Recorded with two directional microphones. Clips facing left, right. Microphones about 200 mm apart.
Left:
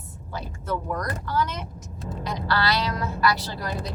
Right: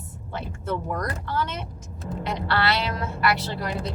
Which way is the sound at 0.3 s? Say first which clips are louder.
Right 1 dB; 25° right (ahead or behind).